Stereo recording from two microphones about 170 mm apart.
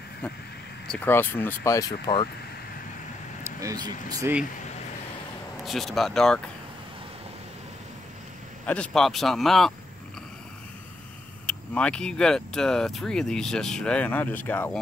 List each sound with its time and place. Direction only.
0.8 s speech: 10° left (ahead or behind); by 2.2 s 25° left (ahead or behind)
3.4 s speech: 20° right (ahead or behind)
5.7 s speech: centre (ahead or behind)
8.6 s speech: 5° left (ahead or behind)
11.4 s speech: 5° left (ahead or behind)